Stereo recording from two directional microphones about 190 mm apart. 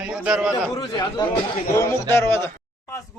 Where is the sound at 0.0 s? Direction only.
5° right (ahead or behind).